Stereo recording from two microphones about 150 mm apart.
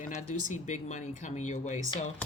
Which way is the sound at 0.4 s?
55° left (ahead or behind).